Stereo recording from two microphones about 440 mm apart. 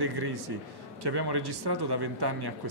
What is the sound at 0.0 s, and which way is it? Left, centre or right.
Speech, right.